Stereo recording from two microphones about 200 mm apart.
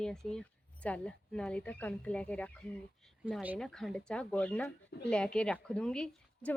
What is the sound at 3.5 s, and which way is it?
A woman's voice, 5° left (ahead or behind).